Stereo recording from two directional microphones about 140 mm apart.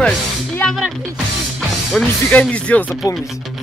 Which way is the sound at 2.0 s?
10° left (ahead or behind).